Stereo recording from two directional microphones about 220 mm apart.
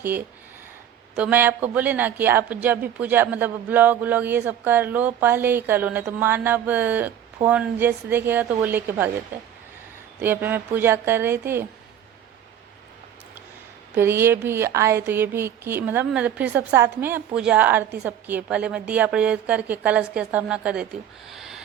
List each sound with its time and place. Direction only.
1.1 s speech: 5° right (ahead or behind)
13.9 s a woman's voice: 10° right (ahead or behind)